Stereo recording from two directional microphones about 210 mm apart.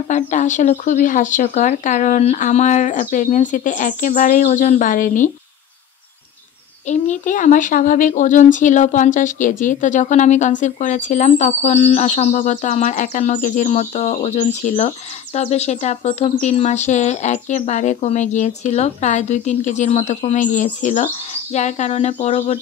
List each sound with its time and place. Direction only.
0.1 s speech: 35° left (ahead or behind)
6.9 s speech: 35° left (ahead or behind)